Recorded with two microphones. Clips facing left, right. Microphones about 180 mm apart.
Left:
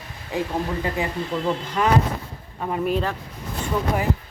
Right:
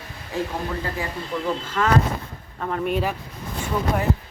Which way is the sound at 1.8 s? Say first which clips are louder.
Even; 15° left (ahead or behind).